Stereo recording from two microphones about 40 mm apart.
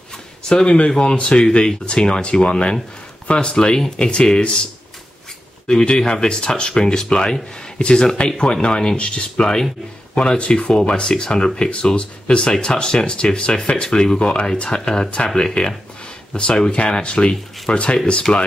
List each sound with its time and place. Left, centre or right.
0.5 s speech: left
5.7 s speech: centre